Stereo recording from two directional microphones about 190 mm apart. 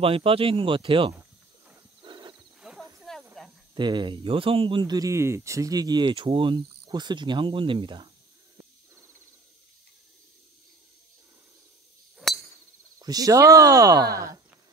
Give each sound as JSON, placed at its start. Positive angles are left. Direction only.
{"t": 0.0, "sound": "speech", "side_deg": -30}
{"t": 2.0, "sound": "horse", "side_deg": -25}
{"t": 2.6, "sound": "wild animals", "side_deg": 0}
{"t": 3.7, "sound": "speech", "side_deg": -25}
{"t": 13.0, "sound": "speech", "side_deg": -20}